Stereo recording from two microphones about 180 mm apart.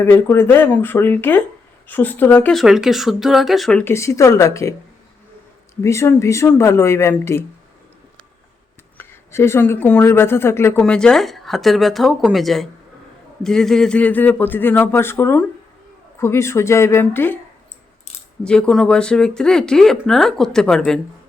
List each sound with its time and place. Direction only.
0.0 s speech: 15° left (ahead or behind)
5.8 s speech: 15° left (ahead or behind)
9.0 s speech: 15° left (ahead or behind)
18.4 s speech: 5° left (ahead or behind)